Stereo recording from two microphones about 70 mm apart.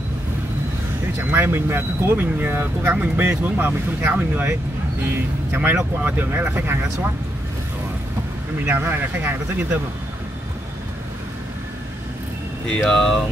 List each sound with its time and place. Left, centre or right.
1.1 s speech: right
8.6 s speech: right
12.6 s speech: centre